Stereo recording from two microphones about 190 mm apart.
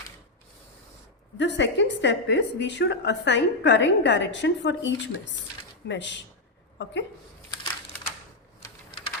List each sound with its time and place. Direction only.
1.4 s a woman's voice: 70° left (ahead or behind)
8.6 s typing: 25° left (ahead or behind)